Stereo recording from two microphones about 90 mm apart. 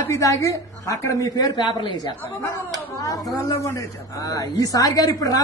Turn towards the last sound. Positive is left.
turn(degrees=45)  # may be behind; listen again after turning